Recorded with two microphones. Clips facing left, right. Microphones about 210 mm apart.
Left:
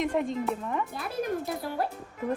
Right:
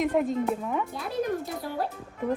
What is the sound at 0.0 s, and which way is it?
Speech, centre (ahead or behind).